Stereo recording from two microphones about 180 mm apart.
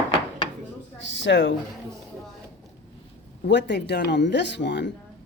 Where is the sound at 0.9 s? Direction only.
90° left.